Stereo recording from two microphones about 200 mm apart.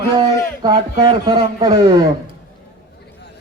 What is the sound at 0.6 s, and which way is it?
A man's voice, 20° right (ahead or behind).